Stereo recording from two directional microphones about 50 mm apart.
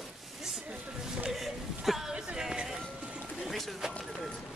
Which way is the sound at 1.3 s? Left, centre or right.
Centre.